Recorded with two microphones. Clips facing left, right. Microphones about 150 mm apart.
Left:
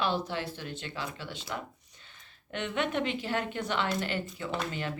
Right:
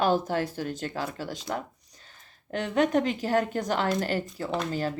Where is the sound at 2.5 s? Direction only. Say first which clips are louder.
Right 7 dB; 35° right (ahead or behind).